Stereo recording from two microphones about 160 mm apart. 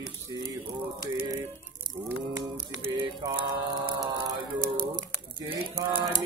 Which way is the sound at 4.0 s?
20° right (ahead or behind).